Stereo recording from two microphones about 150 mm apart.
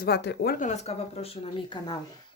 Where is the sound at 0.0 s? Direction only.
90° left.